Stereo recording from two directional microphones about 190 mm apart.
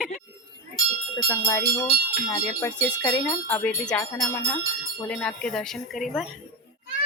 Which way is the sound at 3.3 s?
10° left (ahead or behind).